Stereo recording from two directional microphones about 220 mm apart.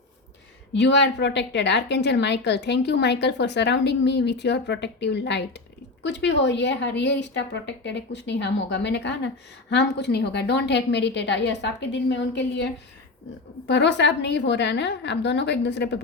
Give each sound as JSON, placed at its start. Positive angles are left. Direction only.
{"t": 0.7, "sound": "a woman's voice", "side_deg": 55}